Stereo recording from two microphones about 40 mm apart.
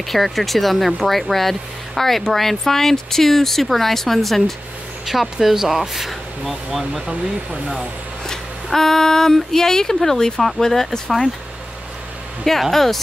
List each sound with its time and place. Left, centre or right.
0.1 s speech: centre
8.7 s speech: centre
12.7 s speech: centre